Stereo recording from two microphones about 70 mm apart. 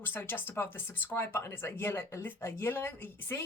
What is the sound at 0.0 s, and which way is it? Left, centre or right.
Speech, left.